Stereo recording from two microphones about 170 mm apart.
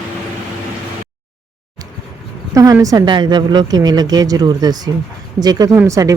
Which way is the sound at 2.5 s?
20° right (ahead or behind).